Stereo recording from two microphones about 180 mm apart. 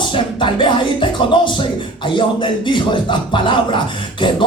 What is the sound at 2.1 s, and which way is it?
Speech, 25° left (ahead or behind).